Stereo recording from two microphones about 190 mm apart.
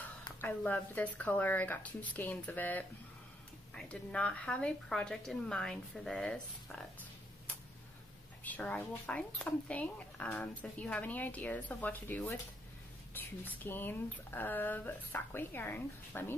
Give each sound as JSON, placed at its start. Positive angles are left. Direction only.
{"t": 0.4, "sound": "a woman's voice", "side_deg": 10}
{"t": 8.5, "sound": "speech", "side_deg": 10}